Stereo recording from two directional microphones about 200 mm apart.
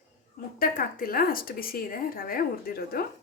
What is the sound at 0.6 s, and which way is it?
A woman's voice, 45° left (ahead or behind).